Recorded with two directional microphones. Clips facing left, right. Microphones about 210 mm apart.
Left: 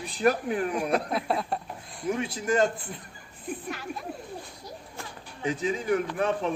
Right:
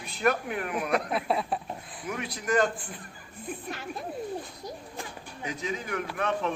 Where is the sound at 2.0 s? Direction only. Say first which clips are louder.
Left 5 dB; 30° left (ahead or behind).